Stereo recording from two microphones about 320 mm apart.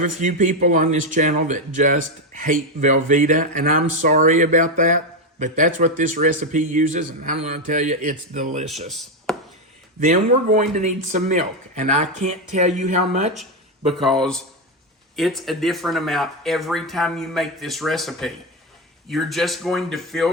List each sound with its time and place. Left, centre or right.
0.0 s speech: right
8.9 s a sound: centre
10.0 s speech: right
15.1 s speech: centre